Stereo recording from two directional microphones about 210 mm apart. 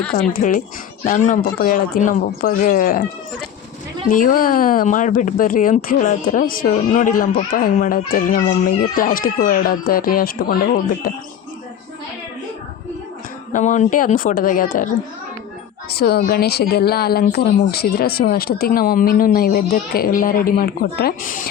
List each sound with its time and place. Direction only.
0.2 s speech: 40° left (ahead or behind)
4.1 s speech: 40° left (ahead or behind)
13.5 s speech: 35° left (ahead or behind)